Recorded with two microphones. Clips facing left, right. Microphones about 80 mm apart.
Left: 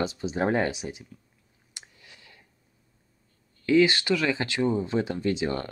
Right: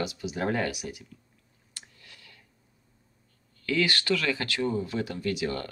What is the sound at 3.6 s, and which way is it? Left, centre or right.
Speech, left.